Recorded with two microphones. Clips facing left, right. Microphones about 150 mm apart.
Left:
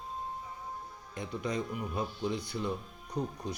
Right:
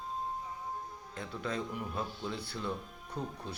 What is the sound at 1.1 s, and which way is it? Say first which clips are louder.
Speech: left 3 dB; 15° left (ahead or behind).